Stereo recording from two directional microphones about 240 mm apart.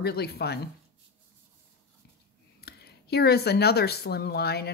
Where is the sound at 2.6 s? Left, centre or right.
Left.